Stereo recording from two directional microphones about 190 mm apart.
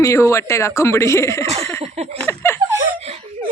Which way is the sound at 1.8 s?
35° right (ahead or behind).